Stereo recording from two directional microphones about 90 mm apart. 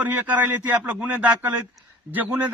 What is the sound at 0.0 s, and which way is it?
A man's voice, 20° right (ahead or behind).